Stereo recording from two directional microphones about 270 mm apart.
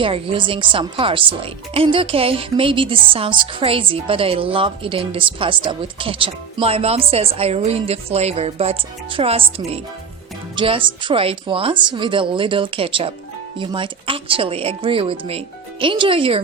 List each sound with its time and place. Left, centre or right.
0.0 s a woman's voice: centre